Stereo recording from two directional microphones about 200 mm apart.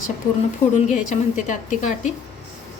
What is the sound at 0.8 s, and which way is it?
A woman's voice, 35° left (ahead or behind).